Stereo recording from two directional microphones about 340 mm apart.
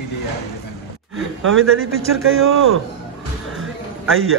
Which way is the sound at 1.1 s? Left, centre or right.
Right.